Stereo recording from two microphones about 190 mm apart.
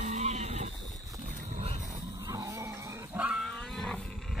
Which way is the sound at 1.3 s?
40° right (ahead or behind).